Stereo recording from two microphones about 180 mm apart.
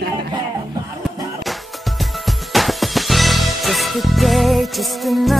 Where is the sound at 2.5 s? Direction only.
Centre (ahead or behind).